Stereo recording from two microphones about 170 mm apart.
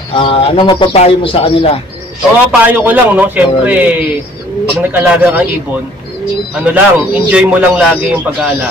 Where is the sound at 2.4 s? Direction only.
10° right (ahead or behind).